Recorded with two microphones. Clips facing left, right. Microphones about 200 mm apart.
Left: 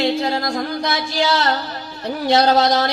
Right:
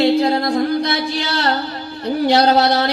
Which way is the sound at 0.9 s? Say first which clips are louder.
Left 2 dB; 60° right (ahead or behind).